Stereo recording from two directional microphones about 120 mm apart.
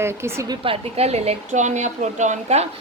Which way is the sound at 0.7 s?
60° right (ahead or behind).